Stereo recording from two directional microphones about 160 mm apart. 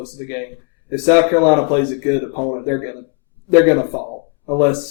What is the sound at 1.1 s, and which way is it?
Speech, 20° right (ahead or behind).